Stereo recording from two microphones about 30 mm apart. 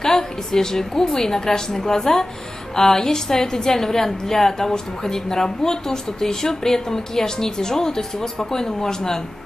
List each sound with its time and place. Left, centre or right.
0.0 s a woman's voice: centre